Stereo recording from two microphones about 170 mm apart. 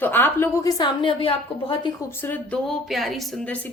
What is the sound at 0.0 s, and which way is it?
A woman's voice, 10° left (ahead or behind).